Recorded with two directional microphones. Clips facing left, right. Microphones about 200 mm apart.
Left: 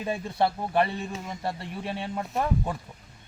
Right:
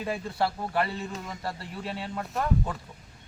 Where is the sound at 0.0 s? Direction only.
20° left (ahead or behind).